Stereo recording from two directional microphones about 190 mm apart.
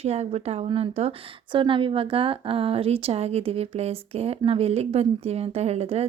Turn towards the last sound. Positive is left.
turn(degrees=-35)  # may be behind; listen again after turning